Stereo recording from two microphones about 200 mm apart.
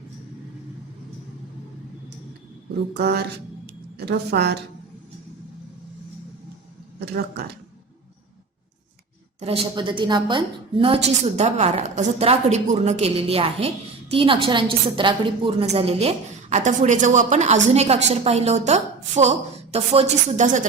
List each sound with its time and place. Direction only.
2.9 s a woman's voice: 55° right (ahead or behind)
7.0 s speech: 50° right (ahead or behind)
9.4 s a woman's voice: 30° right (ahead or behind)